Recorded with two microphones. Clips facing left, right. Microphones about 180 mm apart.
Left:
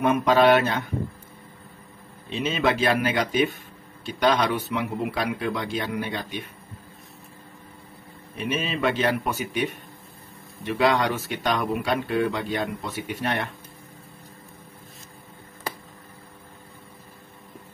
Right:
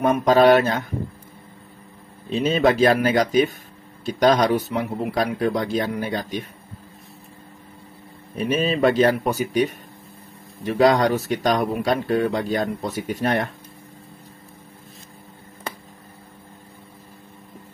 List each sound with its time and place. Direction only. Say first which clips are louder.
0.0 s speech: right 3 dB; 40° right (ahead or behind)
2.2 s speech: right 6 dB; 40° right (ahead or behind)
8.4 s speech: right 7 dB; 40° right (ahead or behind)